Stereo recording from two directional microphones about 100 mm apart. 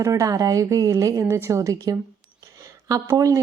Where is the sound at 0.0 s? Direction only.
35° right (ahead or behind).